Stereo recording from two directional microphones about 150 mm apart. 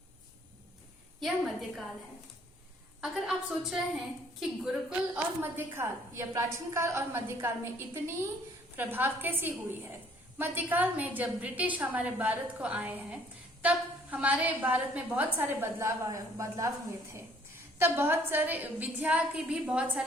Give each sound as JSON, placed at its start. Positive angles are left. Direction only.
{"t": 1.2, "sound": "a woman's voice", "side_deg": 0}
{"t": 3.0, "sound": "a woman's voice", "side_deg": 0}
{"t": 5.4, "sound": "a woman's voice", "side_deg": -15}